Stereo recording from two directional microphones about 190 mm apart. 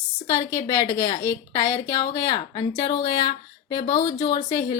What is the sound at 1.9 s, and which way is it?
A woman's voice, 25° left (ahead or behind).